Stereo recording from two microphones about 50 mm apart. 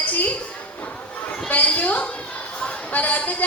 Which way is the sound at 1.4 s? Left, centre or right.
Left.